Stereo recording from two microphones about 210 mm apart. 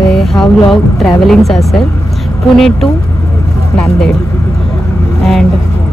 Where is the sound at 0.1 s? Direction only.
Centre (ahead or behind).